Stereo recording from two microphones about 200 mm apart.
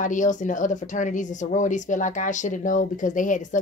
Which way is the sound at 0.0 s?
40° left (ahead or behind).